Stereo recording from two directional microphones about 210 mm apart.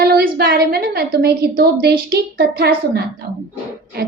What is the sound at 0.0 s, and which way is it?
A woman's voice, 45° right (ahead or behind).